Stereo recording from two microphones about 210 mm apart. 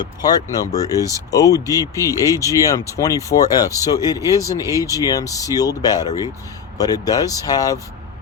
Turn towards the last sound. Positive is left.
turn(degrees=15)  # may be behind; listen again after turning